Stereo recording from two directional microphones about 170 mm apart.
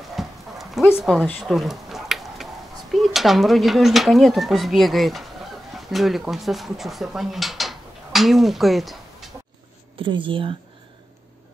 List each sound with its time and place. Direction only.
0.1 s horse: centre (ahead or behind)
0.9 s speech: 5° right (ahead or behind)
1.2 s a sound: centre (ahead or behind)
2.9 s speech: centre (ahead or behind)
5.9 s mechanisms: centre (ahead or behind)
9.9 s speech: 30° right (ahead or behind)